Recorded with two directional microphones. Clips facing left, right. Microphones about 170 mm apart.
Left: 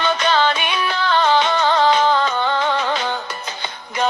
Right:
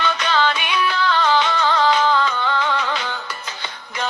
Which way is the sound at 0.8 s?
25° left (ahead or behind).